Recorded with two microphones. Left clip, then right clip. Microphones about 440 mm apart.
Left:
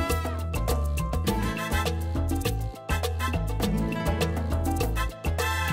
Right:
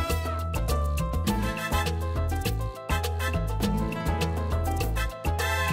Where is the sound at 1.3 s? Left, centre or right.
Left.